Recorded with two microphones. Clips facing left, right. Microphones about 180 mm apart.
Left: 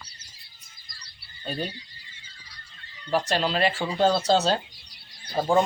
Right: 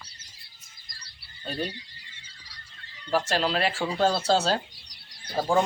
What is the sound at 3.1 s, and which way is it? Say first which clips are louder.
Speech: left 1 dB; 5° right (ahead or behind).